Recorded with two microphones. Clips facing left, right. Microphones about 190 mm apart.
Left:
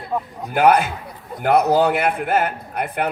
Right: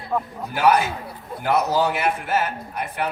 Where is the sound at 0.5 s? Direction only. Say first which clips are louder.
Left 3 dB; 55° left (ahead or behind).